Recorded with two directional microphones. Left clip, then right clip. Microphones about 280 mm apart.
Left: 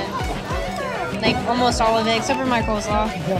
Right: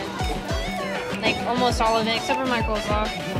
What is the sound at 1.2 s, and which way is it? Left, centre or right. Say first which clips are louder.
Speech: left 3 dB; centre.